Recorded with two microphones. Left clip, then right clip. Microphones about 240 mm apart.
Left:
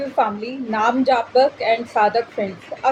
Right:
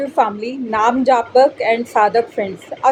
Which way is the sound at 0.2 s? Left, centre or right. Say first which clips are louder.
Right 3 dB; right.